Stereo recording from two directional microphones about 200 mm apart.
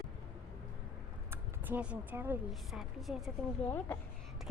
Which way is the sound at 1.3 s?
10° right (ahead or behind).